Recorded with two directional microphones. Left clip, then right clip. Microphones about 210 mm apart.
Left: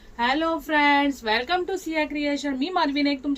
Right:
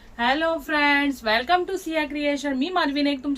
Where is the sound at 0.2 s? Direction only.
15° right (ahead or behind).